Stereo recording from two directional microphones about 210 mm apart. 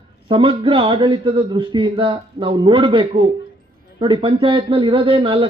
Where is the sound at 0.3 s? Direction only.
25° right (ahead or behind).